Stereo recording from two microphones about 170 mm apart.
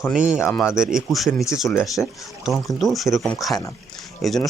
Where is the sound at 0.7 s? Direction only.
5° right (ahead or behind).